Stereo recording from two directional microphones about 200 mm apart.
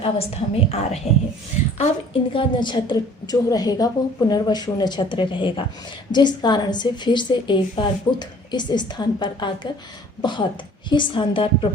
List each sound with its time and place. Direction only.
0.0 s a woman's voice: 30° left (ahead or behind)
2.3 s a woman's voice: 25° left (ahead or behind)